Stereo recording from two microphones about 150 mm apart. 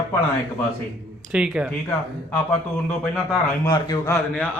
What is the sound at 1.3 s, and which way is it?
Speech, 5° right (ahead or behind).